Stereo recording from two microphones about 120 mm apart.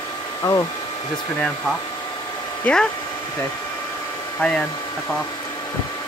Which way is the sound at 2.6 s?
5° left (ahead or behind).